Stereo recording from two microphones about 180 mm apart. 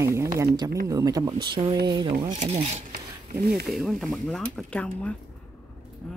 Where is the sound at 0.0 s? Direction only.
15° right (ahead or behind).